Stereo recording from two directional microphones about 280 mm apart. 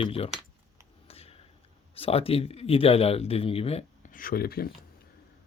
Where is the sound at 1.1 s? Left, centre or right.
Left.